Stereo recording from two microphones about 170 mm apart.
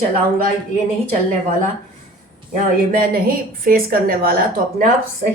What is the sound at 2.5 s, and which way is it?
A woman's voice, 55° right (ahead or behind).